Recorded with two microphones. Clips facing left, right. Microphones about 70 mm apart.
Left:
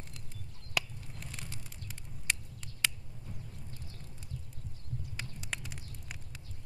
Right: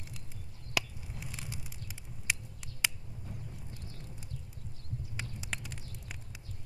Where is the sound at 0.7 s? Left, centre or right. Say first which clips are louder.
Right 1 dB; centre.